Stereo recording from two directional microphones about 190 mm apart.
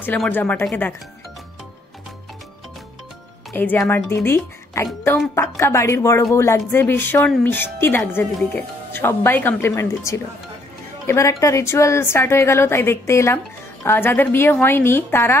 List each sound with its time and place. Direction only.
0.0 s a woman's voice: 10° left (ahead or behind)
3.5 s a woman's voice: 10° left (ahead or behind)